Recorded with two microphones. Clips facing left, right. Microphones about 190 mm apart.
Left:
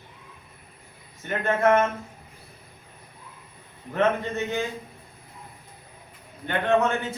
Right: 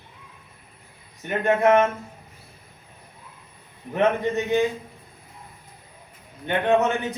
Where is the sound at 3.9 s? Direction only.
15° right (ahead or behind).